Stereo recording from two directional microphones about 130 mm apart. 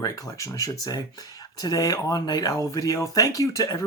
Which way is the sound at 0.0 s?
25° left (ahead or behind).